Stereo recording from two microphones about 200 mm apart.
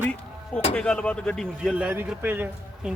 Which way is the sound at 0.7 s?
5° left (ahead or behind).